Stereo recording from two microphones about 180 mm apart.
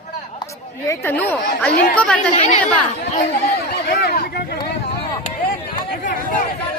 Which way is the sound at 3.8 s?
60° left (ahead or behind).